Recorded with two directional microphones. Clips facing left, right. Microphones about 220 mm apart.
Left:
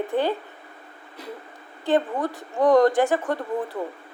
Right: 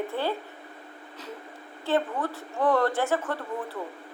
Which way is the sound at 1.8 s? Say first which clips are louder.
Left 4 dB; 15° left (ahead or behind).